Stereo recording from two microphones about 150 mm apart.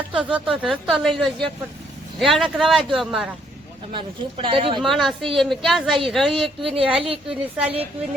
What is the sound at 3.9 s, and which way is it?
Speech, 35° right (ahead or behind).